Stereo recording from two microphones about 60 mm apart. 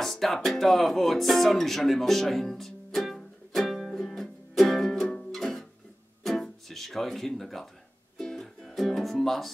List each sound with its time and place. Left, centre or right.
0.0 s music: centre